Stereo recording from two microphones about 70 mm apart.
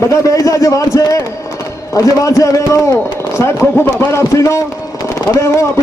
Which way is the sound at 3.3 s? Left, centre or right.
Left.